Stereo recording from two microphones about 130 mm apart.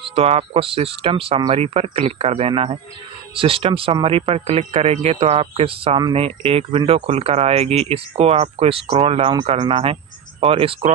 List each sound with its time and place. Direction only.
0.0 s speech: 45° right (ahead or behind)